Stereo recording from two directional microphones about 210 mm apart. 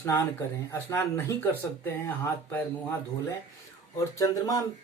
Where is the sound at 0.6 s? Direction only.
10° left (ahead or behind).